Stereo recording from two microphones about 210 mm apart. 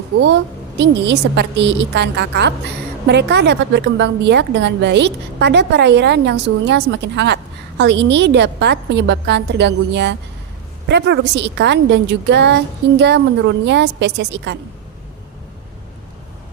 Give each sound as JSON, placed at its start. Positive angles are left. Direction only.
{"t": 0.8, "sound": "a woman's voice", "side_deg": -55}